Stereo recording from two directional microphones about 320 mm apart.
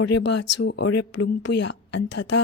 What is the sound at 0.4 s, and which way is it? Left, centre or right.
Speech, left.